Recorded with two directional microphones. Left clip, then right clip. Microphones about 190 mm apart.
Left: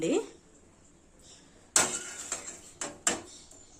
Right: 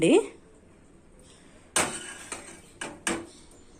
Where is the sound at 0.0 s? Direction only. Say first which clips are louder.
Right 8 dB; 15° right (ahead or behind).